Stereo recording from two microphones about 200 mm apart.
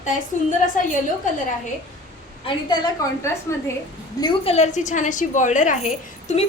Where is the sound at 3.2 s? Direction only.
15° left (ahead or behind).